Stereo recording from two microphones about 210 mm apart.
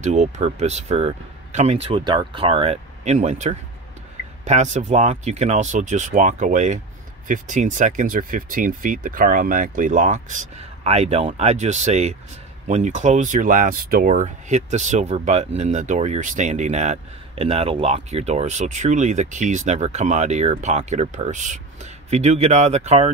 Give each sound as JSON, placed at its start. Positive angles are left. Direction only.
{"t": 0.0, "sound": "speech", "side_deg": -35}